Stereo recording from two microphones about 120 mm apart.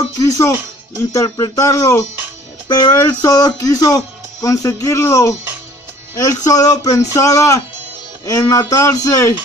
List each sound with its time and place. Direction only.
0.2 s speech: 30° left (ahead or behind)